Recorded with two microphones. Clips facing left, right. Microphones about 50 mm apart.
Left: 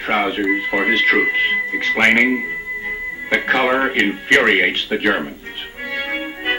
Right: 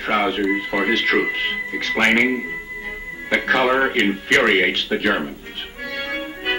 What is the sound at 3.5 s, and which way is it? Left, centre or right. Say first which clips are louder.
Speech: even; left.